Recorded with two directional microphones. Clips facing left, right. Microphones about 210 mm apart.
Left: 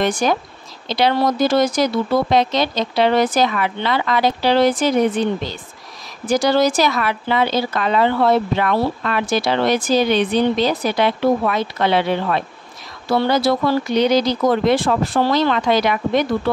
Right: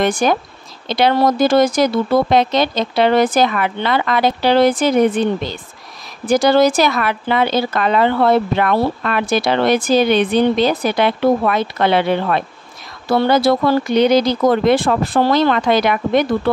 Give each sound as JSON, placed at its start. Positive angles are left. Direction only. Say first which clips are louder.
{"t": 0.0, "sound": "speech", "louder": "right 2 dB", "side_deg": -55}
{"t": 6.2, "sound": "speech", "louder": "right 3 dB", "side_deg": -55}